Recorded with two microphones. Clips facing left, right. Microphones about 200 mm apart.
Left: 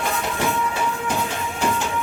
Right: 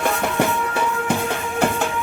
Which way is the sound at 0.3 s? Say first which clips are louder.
Right 3 dB; 60° right (ahead or behind).